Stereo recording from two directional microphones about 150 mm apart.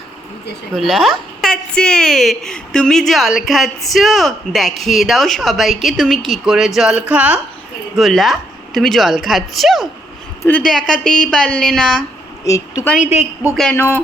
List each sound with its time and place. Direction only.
0.8 s a woman's voice: centre (ahead or behind)
12.5 s a woman's voice: 20° left (ahead or behind)